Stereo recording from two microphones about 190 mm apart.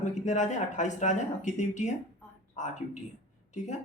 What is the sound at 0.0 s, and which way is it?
Speech, 40° left (ahead or behind).